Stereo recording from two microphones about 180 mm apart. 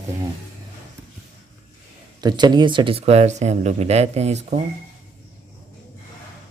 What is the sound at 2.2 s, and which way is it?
Speech, 25° right (ahead or behind).